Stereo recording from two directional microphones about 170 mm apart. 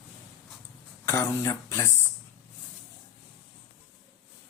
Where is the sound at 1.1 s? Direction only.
15° left (ahead or behind).